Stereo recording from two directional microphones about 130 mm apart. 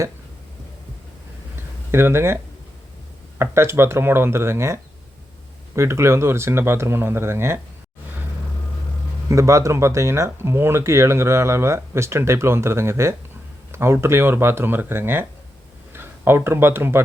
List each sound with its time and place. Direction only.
1.9 s speech: 20° right (ahead or behind)
9.3 s speech: 25° right (ahead or behind)